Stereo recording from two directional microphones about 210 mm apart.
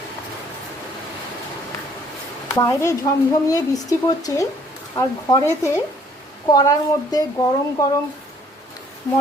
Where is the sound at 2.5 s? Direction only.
15° left (ahead or behind).